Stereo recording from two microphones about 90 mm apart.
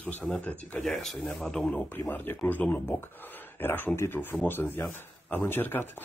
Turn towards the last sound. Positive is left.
turn(degrees=20)  # may be behind; listen again after turning